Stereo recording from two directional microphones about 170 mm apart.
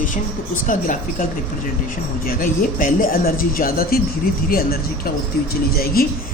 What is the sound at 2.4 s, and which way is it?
Speech, 55° left (ahead or behind).